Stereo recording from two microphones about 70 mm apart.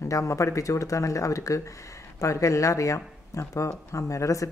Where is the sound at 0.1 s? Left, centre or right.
Left.